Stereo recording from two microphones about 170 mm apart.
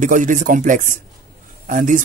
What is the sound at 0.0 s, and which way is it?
Speech, 50° right (ahead or behind).